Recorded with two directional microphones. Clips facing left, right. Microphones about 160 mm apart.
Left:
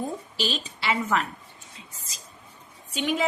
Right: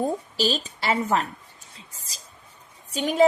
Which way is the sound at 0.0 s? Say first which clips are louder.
Right 5 dB; 40° right (ahead or behind).